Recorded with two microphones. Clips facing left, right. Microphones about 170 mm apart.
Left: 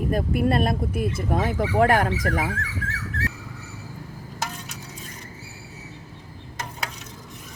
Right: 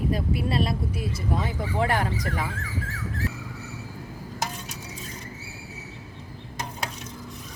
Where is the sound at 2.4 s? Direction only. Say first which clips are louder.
Left 3 dB; 70° left (ahead or behind).